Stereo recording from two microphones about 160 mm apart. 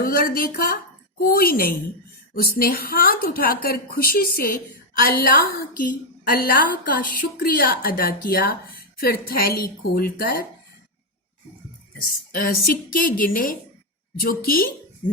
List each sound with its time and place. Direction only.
0.0 s a woman's voice: 65° left (ahead or behind)
12.3 s a woman's voice: 65° left (ahead or behind)